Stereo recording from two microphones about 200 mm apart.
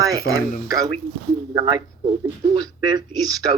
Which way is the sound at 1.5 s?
20° right (ahead or behind).